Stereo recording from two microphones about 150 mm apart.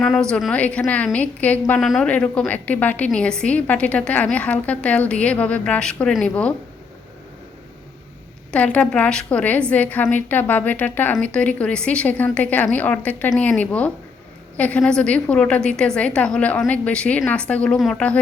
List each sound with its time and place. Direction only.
0.0 s a woman's voice: 5° left (ahead or behind)
8.5 s a woman's voice: 10° left (ahead or behind)